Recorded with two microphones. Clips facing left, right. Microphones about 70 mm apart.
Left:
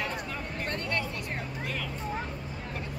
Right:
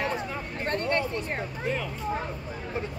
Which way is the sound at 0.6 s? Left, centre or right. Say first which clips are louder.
Right 7 dB; right.